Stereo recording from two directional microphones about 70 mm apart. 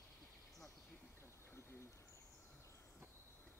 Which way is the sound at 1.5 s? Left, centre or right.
Left.